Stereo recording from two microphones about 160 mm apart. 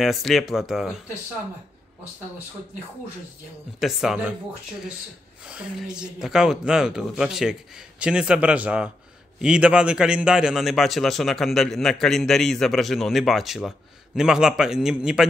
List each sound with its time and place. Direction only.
0.0 s a man's voice: centre (ahead or behind)
3.8 s a man's voice: 5° right (ahead or behind)
5.4 s a man's voice: 5° right (ahead or behind)